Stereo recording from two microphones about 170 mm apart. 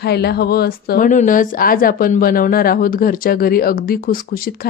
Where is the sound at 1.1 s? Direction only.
50° left (ahead or behind).